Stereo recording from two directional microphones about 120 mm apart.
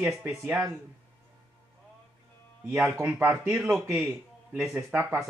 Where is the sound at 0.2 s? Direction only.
20° right (ahead or behind).